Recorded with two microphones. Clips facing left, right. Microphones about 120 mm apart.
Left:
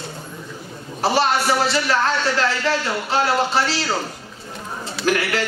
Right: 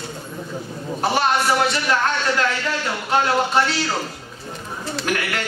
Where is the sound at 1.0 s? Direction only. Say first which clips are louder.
Left 1 dB; 30° left (ahead or behind).